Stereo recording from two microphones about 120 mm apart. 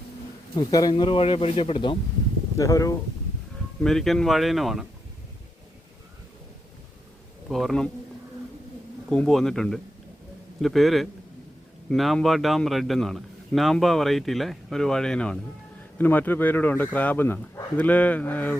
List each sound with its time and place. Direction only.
0.5 s speech: 35° left (ahead or behind)
2.6 s speech: 25° left (ahead or behind)
3.8 s a man's voice: centre (ahead or behind)
7.4 s speech: centre (ahead or behind)
9.0 s a man's voice: 5° left (ahead or behind)